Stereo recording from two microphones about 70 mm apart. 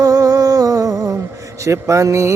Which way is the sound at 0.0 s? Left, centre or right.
Right.